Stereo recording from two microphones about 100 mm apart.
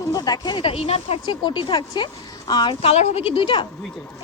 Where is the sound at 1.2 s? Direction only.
50° left (ahead or behind).